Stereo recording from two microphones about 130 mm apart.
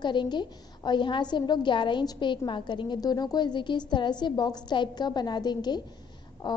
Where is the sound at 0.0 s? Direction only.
35° left (ahead or behind).